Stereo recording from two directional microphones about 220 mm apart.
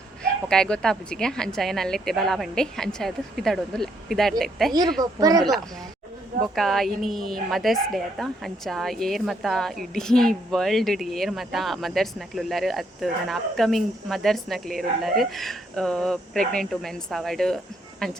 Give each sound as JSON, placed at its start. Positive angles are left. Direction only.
{"t": 0.2, "sound": "speech", "side_deg": 5}
{"t": 5.3, "sound": "speech", "side_deg": -15}
{"t": 6.6, "sound": "speech", "side_deg": 0}